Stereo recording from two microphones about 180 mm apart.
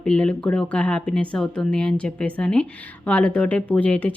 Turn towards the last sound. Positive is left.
turn(degrees=10)  # may be behind; listen again after turning